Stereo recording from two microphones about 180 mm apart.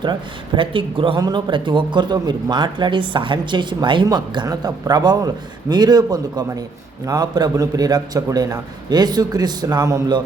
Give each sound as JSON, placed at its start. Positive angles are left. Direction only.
{"t": 0.0, "sound": "speech", "side_deg": -25}